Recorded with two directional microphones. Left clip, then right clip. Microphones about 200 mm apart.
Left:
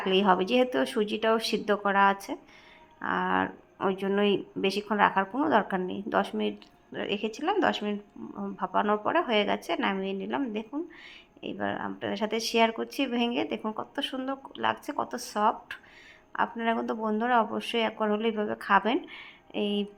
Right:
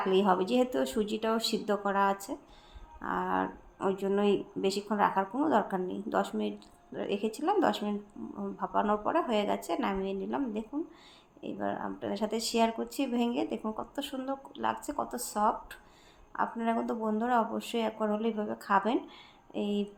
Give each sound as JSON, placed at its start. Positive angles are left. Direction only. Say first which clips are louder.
{"t": 0.0, "sound": "speech", "louder": "left 3 dB", "side_deg": 20}